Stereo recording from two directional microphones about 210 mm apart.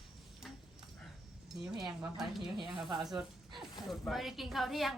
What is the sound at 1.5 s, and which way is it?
Speech, centre (ahead or behind).